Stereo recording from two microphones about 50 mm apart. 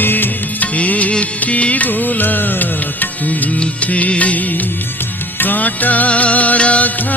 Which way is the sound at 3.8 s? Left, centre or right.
Left.